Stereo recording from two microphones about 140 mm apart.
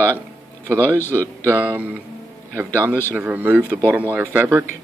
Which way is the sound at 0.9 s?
15° left (ahead or behind).